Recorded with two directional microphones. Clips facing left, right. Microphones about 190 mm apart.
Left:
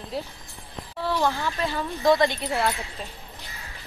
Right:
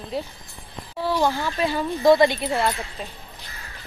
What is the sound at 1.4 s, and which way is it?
Speech, 15° right (ahead or behind).